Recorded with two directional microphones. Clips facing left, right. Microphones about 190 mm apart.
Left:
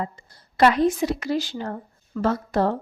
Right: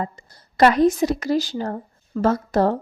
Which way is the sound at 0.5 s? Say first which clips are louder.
Right 3 dB; 40° right (ahead or behind).